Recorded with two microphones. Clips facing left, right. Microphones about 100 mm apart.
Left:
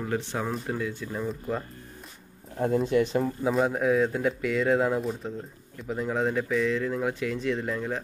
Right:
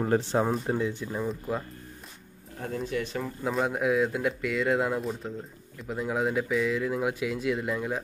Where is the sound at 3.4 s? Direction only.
Centre (ahead or behind).